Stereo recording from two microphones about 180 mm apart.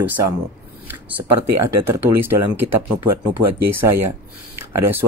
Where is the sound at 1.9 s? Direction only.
15° right (ahead or behind).